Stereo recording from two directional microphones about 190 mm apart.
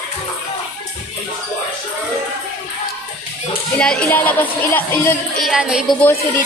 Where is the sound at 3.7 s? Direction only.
5° left (ahead or behind).